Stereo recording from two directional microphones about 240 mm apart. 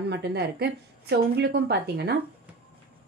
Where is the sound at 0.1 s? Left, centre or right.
Right.